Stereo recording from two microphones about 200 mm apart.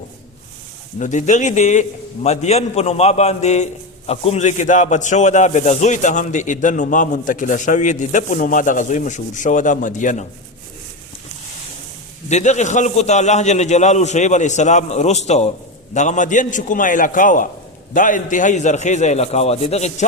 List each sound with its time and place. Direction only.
0.9 s a man's voice: 35° left (ahead or behind)
12.3 s a man's voice: 35° left (ahead or behind)